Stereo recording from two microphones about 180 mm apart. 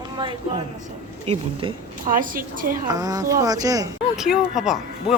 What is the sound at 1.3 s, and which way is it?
Speech, 35° right (ahead or behind).